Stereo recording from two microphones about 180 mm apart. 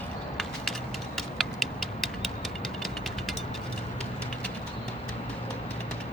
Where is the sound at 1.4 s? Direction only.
Centre (ahead or behind).